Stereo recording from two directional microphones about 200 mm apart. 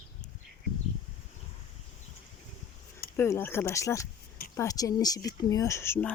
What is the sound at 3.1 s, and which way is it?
Speech, 10° left (ahead or behind).